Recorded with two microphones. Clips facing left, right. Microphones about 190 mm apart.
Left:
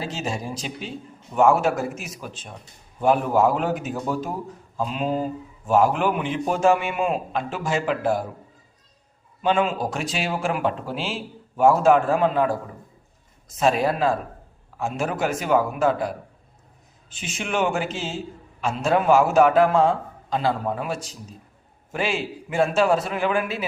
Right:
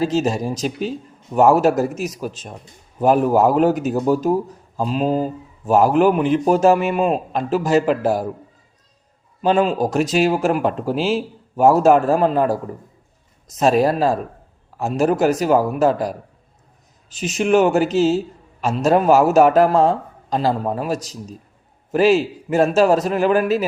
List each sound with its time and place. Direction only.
0.0 s a man's voice: 40° right (ahead or behind)
9.4 s a man's voice: 40° right (ahead or behind)